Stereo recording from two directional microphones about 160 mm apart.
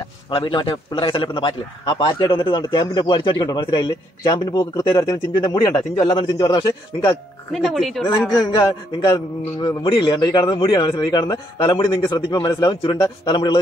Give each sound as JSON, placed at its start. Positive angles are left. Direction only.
{"t": 0.3, "sound": "a man's voice", "side_deg": 30}
{"t": 7.5, "sound": "speech", "side_deg": 0}
{"t": 8.5, "sound": "a man's voice", "side_deg": 25}